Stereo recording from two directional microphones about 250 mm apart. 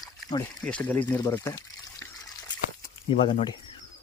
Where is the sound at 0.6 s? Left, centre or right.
Centre.